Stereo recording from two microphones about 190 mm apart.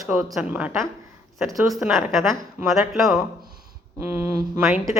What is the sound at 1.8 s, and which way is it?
A woman's voice, 5° right (ahead or behind).